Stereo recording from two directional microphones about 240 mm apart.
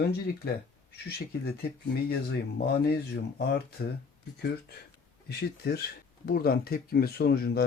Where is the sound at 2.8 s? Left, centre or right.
Left.